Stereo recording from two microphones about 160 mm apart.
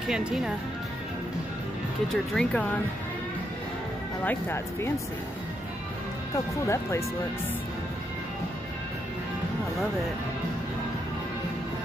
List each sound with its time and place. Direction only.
0.1 s speech: 5° right (ahead or behind)
2.0 s speech: 5° left (ahead or behind)
4.2 s speech: 15° left (ahead or behind)
6.3 s speech: 20° left (ahead or behind)